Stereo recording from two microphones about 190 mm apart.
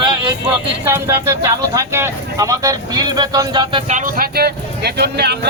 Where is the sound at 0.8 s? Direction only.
15° right (ahead or behind).